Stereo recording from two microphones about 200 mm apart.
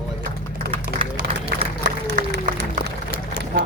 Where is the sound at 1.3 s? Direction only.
25° right (ahead or behind).